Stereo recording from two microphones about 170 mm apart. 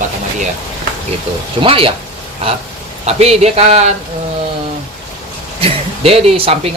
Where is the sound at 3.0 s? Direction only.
40° right (ahead or behind).